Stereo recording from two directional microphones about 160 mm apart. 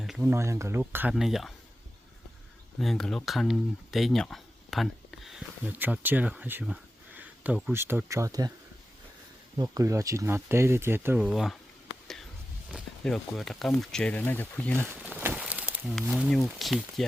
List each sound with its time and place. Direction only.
0.0 s a sound: 5° right (ahead or behind)
0.3 s speech: 15° right (ahead or behind)
1.1 s speech: centre (ahead or behind)
2.8 s speech: centre (ahead or behind); by 8.5 s 25° right (ahead or behind)
9.6 s speech: 20° right (ahead or behind); by 11.5 s 5° right (ahead or behind)
12.7 s speech: centre (ahead or behind)
14.8 s speech: 10° right (ahead or behind)
15.2 s a sound: 10° right (ahead or behind)
16.6 s speech: centre (ahead or behind)